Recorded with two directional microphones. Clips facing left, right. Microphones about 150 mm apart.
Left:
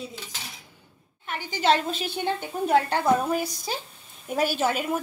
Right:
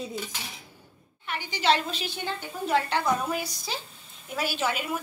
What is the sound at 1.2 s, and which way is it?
A woman's voice, 45° left (ahead or behind).